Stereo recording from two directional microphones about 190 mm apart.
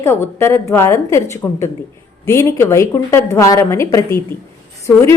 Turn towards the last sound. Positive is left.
turn(degrees=15)  # may be behind; listen again after turning